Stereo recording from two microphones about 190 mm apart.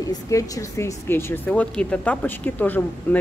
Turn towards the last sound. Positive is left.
turn(degrees=10)  # may be behind; listen again after turning